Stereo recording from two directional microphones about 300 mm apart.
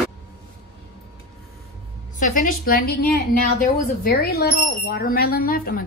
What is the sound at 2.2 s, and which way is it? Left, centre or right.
A woman's voice, left.